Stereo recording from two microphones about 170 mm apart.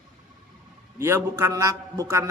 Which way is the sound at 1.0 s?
15° right (ahead or behind).